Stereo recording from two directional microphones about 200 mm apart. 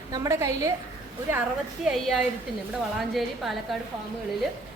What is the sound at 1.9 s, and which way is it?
A woman's voice, centre (ahead or behind).